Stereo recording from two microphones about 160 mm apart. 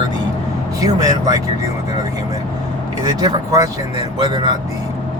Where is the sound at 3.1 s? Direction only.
25° right (ahead or behind).